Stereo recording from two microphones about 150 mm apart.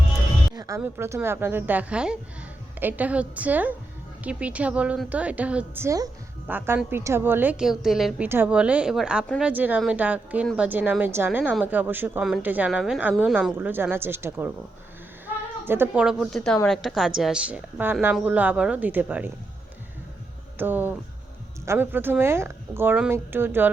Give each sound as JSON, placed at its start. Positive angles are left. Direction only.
{"t": 0.5, "sound": "music", "side_deg": -25}
{"t": 0.8, "sound": "a woman's voice", "side_deg": -15}
{"t": 15.6, "sound": "a woman's voice", "side_deg": -15}
{"t": 20.6, "sound": "a woman's voice", "side_deg": -10}